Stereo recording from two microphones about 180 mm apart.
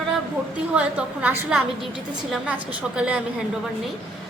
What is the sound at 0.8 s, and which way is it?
A woman's voice, 5° right (ahead or behind).